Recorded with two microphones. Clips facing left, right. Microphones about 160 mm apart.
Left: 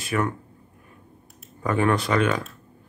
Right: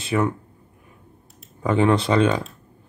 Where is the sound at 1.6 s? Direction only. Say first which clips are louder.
Right 3 dB; 20° right (ahead or behind).